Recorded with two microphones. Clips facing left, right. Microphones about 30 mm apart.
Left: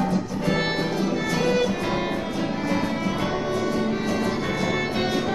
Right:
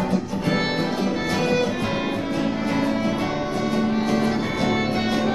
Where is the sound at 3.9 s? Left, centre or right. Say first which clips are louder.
Right 3 dB; centre.